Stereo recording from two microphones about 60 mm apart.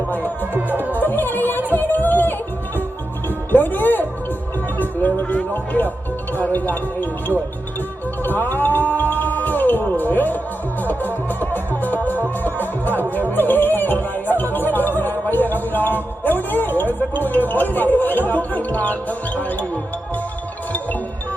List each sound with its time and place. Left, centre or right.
0.2 s speech: right
0.9 s music: left
1.7 s yodeling: left
3.2 s music: left
5.7 s speech: left
8.4 s music: left
18.3 s speech: left